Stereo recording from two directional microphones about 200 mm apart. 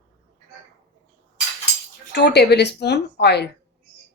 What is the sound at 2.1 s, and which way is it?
Speech, 55° left (ahead or behind).